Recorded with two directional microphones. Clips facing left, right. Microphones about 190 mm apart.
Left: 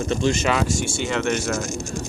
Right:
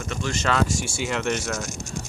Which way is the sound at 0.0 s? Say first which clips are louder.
Left 8 dB; 25° left (ahead or behind).